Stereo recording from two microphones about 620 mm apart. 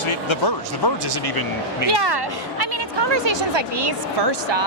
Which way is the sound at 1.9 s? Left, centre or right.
Right.